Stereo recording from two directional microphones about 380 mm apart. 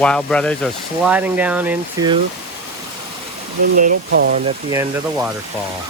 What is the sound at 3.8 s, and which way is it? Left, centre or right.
Speech, right.